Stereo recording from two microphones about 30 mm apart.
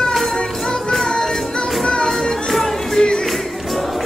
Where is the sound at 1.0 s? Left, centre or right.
Left.